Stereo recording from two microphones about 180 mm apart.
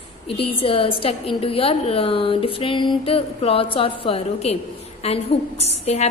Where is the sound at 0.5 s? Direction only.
30° left (ahead or behind).